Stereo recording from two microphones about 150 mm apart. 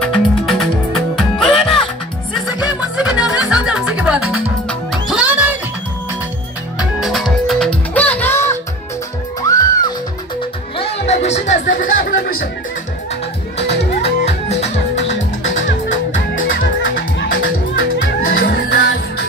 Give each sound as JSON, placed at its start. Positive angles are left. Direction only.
{"t": 0.0, "sound": "music", "side_deg": 0}
{"t": 6.8, "sound": "music", "side_deg": 0}
{"t": 10.8, "sound": "music", "side_deg": 45}
{"t": 13.6, "sound": "music", "side_deg": 45}
{"t": 18.3, "sound": "music", "side_deg": 90}